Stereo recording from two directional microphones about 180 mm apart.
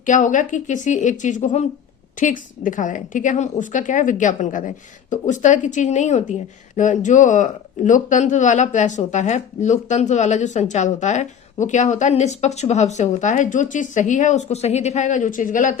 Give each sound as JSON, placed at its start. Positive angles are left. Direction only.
{"t": 0.0, "sound": "speech", "side_deg": 45}